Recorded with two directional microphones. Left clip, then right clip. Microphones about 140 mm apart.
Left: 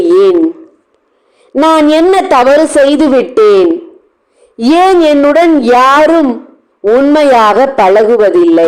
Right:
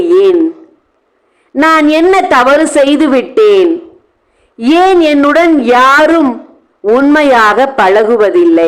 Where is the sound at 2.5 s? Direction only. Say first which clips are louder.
Left 1 dB; 15° left (ahead or behind).